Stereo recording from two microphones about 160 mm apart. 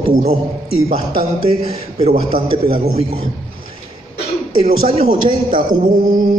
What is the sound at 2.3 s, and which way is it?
Speech, 35° right (ahead or behind).